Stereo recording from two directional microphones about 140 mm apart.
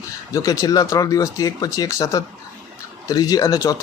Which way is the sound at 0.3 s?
25° left (ahead or behind).